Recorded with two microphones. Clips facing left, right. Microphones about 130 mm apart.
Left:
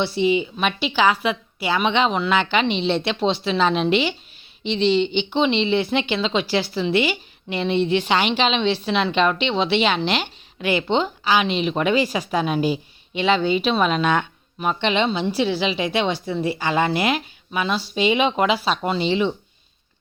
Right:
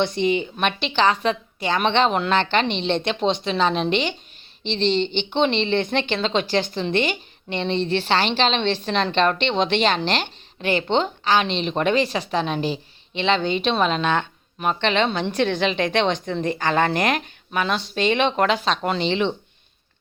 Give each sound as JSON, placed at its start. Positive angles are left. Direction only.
{"t": 0.0, "sound": "a woman's voice", "side_deg": 10}
{"t": 10.6, "sound": "speech", "side_deg": -40}
{"t": 10.8, "sound": "a woman's voice", "side_deg": 5}